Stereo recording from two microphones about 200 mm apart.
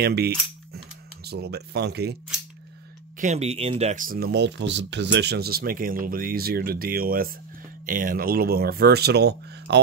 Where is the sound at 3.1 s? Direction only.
35° right (ahead or behind).